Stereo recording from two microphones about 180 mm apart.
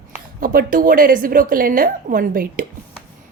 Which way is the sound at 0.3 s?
50° right (ahead or behind).